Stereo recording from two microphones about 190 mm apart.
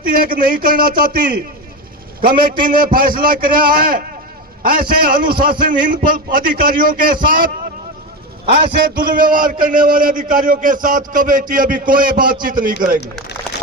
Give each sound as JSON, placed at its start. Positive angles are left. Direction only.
{"t": 0.0, "sound": "a man's voice", "side_deg": -50}
{"t": 8.7, "sound": "a man's voice", "side_deg": -50}